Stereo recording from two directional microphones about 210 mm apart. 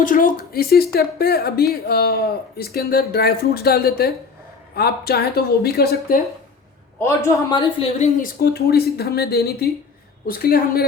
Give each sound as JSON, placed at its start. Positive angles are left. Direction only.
{"t": 0.0, "sound": "a woman's voice", "side_deg": 40}
{"t": 7.0, "sound": "a man's voice", "side_deg": 10}
{"t": 7.6, "sound": "a woman's voice", "side_deg": 30}
{"t": 8.4, "sound": "a woman's voice", "side_deg": 50}